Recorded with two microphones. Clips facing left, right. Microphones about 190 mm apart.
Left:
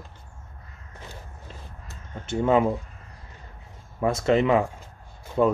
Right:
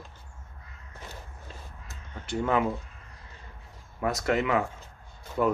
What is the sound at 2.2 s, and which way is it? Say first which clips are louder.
Speech: left 5 dB; 25° left (ahead or behind).